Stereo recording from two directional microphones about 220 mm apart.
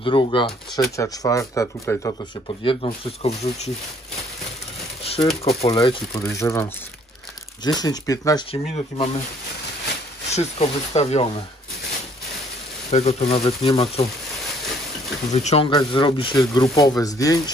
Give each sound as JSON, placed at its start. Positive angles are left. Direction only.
{"t": 0.0, "sound": "speech", "side_deg": 25}
{"t": 2.6, "sound": "speech", "side_deg": 25}
{"t": 5.0, "sound": "a sound", "side_deg": 25}
{"t": 5.4, "sound": "speech", "side_deg": 30}
{"t": 8.5, "sound": "speech", "side_deg": 25}
{"t": 10.3, "sound": "speech", "side_deg": 30}
{"t": 12.9, "sound": "speech", "side_deg": 30}
{"t": 15.3, "sound": "speech", "side_deg": 30}